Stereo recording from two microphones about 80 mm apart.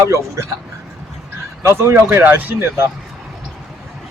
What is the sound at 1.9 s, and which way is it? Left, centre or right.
Speech, right.